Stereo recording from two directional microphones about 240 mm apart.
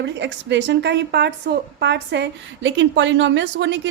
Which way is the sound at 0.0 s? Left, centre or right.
Right.